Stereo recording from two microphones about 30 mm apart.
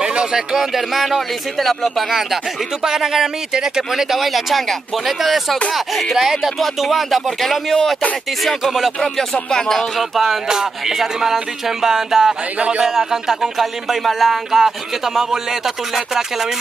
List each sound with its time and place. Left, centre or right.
0.0 s a sound: right
0.3 s speech: centre
0.6 s speech: centre
2.1 s speech: centre
3.9 s speech: centre
9.0 s speech: centre
9.9 s speech: centre
10.5 s speech: centre
12.5 s a man's voice: right
12.8 s speech: centre
14.5 s speech: centre